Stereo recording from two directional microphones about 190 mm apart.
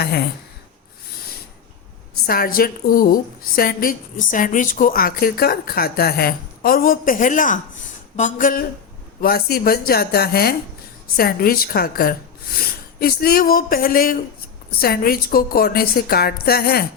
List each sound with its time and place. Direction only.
2.2 s a woman's voice: 50° left (ahead or behind)